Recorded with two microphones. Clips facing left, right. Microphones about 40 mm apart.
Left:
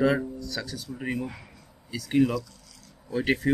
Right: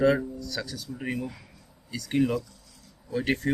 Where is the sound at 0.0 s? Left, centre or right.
Centre.